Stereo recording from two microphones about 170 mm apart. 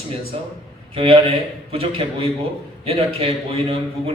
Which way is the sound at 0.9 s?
30° right (ahead or behind).